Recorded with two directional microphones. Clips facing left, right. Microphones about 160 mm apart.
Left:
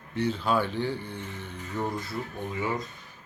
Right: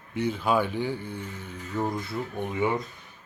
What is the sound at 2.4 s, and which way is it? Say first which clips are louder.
Speech: right 6 dB; 20° right (ahead or behind).